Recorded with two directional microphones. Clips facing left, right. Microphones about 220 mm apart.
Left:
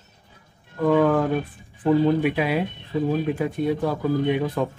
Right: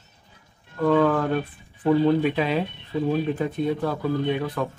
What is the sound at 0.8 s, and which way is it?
Speech, 10° left (ahead or behind).